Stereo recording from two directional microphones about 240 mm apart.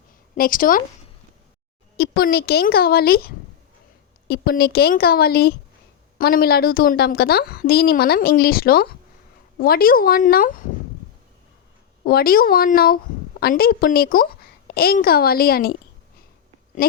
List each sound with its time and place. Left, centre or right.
0.3 s a woman's voice: left
2.0 s a woman's voice: left
12.0 s a woman's voice: left